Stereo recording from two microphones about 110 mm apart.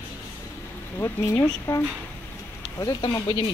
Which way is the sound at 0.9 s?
25° left (ahead or behind).